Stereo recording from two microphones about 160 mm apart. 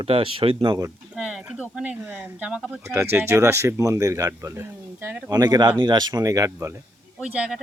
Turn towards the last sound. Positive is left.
turn(degrees=-5)  # may be behind; listen again after turning